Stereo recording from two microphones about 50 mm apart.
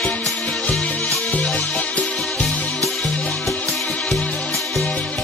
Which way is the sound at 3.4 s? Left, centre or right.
Centre.